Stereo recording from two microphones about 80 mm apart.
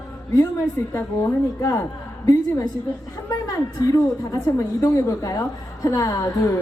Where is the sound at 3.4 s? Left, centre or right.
Left.